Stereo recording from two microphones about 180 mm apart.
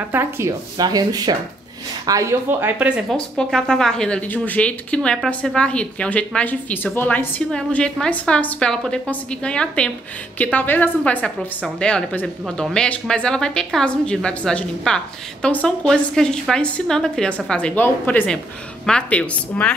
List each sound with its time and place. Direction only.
0.1 s speech: 15° right (ahead or behind)
3.1 s a woman's voice: centre (ahead or behind)